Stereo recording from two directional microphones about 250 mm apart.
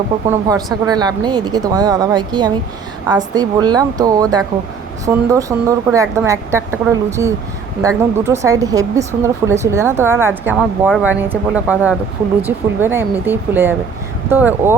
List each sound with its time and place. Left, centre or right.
0.3 s speech: centre